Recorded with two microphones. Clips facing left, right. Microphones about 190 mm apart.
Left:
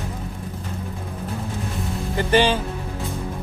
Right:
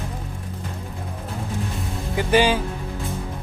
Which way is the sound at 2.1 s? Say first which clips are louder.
Even; 10° right (ahead or behind).